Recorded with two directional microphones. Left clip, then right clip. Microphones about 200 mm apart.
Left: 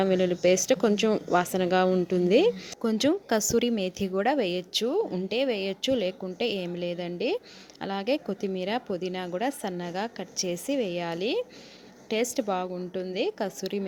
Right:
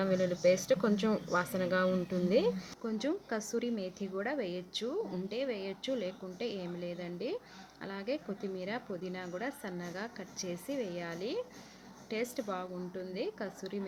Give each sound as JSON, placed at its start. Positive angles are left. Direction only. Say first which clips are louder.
{"t": 0.0, "sound": "speech", "louder": "left 6 dB", "side_deg": 35}